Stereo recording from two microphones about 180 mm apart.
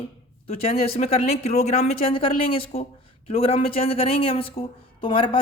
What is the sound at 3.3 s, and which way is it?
Speech, 30° left (ahead or behind).